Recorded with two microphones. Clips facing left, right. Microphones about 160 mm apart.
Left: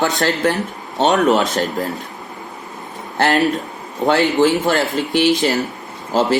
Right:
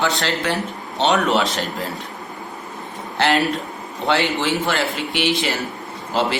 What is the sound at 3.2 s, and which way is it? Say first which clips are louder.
Speech: left 3 dB; 45° left (ahead or behind).